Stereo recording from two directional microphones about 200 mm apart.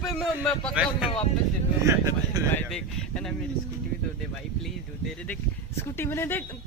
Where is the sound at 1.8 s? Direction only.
15° right (ahead or behind).